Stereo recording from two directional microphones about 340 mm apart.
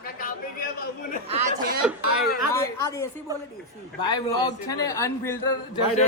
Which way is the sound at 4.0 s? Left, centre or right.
Centre.